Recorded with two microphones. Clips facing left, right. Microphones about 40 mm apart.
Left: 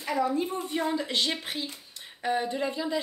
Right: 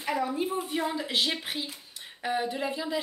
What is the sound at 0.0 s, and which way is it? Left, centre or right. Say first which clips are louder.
Speech: left 2 dB; centre.